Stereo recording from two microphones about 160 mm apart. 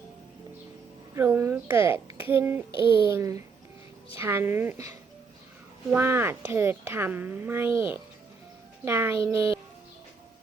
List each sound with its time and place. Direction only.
1.1 s a woman's voice: 15° right (ahead or behind)
2.7 s speech: 30° left (ahead or behind)
3.1 s a woman's voice: 20° right (ahead or behind)